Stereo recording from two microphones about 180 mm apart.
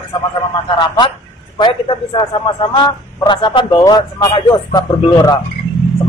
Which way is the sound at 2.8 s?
25° left (ahead or behind).